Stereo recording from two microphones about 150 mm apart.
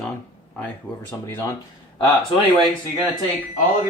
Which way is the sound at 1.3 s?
20° left (ahead or behind).